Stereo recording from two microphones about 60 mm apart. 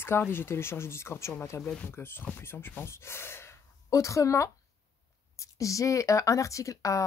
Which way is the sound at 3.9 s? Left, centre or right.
Left.